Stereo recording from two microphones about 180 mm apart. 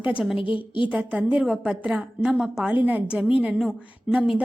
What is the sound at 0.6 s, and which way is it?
Speech, 25° left (ahead or behind).